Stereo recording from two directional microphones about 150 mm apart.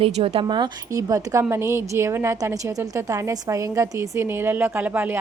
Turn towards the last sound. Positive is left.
turn(degrees=-15)  # may be behind; listen again after turning